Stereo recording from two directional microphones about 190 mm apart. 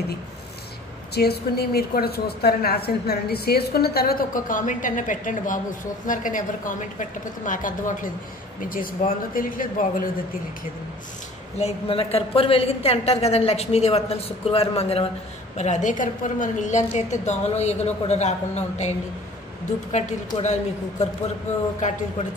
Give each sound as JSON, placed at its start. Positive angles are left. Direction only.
{"t": 1.1, "sound": "a woman's voice", "side_deg": 55}
{"t": 11.5, "sound": "a woman's voice", "side_deg": 30}
{"t": 21.8, "sound": "a woman's voice", "side_deg": 40}